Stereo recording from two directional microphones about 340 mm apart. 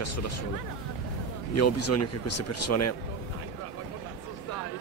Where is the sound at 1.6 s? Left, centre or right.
Left.